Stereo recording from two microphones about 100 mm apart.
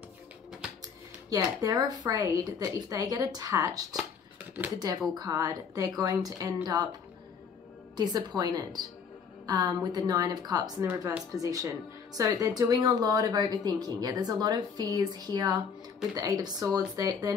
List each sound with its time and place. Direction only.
1.3 s speech: 40° right (ahead or behind)
7.9 s a woman's voice: 45° right (ahead or behind)